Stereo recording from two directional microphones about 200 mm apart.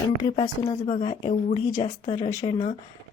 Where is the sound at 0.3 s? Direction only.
20° left (ahead or behind).